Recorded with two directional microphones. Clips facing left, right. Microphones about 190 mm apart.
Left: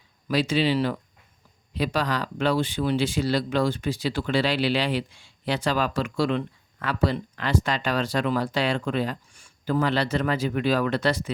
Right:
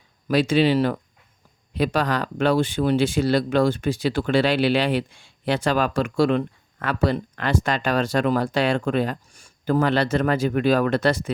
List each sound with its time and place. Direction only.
0.3 s speech: 55° right (ahead or behind)